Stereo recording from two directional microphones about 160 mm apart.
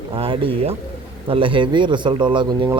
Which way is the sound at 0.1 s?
35° right (ahead or behind).